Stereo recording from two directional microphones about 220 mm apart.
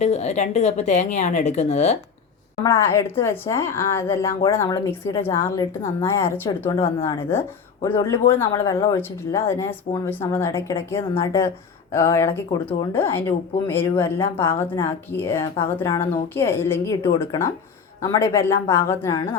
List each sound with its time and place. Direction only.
0.0 s speech: 30° left (ahead or behind)
2.6 s a woman's voice: 15° left (ahead or behind)
6.7 s speech: 25° left (ahead or behind)
7.0 s a woman's voice: 10° left (ahead or behind)